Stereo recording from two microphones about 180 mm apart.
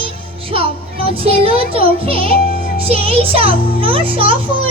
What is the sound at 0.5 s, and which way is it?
A child's voice, 30° right (ahead or behind).